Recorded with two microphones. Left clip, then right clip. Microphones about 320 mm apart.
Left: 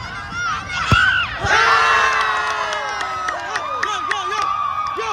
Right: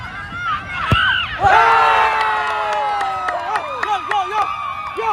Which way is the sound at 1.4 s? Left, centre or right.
Centre.